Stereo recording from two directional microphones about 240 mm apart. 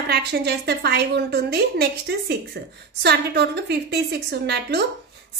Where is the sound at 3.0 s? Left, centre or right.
Right.